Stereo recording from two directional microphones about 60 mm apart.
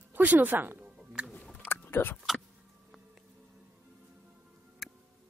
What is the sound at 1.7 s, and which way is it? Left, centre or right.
Biting, left.